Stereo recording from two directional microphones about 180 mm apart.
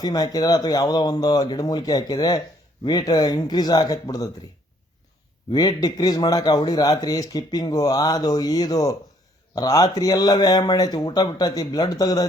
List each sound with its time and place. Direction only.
0.0 s a man's voice: 20° left (ahead or behind)
5.5 s a man's voice: 20° left (ahead or behind)